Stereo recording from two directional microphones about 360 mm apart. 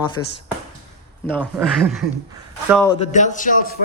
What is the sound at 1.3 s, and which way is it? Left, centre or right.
A man's voice, centre.